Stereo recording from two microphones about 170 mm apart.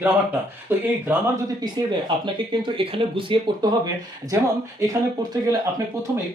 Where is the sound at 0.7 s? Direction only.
10° right (ahead or behind).